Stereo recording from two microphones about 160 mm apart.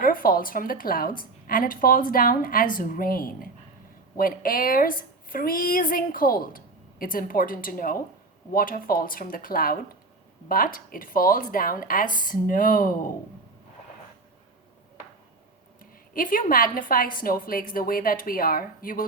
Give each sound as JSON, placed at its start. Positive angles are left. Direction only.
{"t": 0.0, "sound": "a woman's voice", "side_deg": 60}
{"t": 15.8, "sound": "a woman's voice", "side_deg": 60}